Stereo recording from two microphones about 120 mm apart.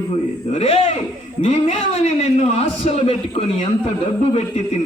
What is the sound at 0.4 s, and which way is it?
A man's voice, 55° left (ahead or behind).